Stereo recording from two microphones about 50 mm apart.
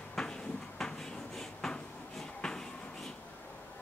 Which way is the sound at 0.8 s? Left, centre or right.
Centre.